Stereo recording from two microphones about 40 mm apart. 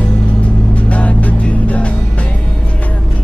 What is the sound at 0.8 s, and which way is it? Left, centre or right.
Music, left.